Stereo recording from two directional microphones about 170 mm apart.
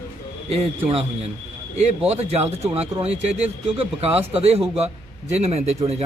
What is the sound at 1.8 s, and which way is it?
Speech, 35° right (ahead or behind).